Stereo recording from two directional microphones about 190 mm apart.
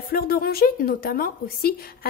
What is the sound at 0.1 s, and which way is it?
A woman's voice, 55° left (ahead or behind).